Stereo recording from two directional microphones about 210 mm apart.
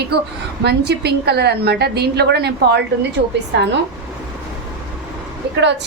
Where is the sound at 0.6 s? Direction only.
50° right (ahead or behind).